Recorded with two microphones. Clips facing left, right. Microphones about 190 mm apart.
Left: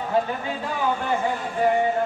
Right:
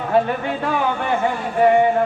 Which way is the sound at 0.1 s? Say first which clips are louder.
Right 6 dB; 70° right (ahead or behind).